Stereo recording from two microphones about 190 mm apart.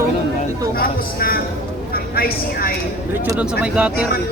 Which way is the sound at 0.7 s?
50° left (ahead or behind).